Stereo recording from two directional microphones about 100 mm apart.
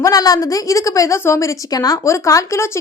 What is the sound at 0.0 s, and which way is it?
Speech, 35° left (ahead or behind).